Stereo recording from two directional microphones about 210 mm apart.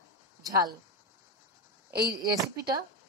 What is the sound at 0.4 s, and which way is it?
Speech, 15° right (ahead or behind).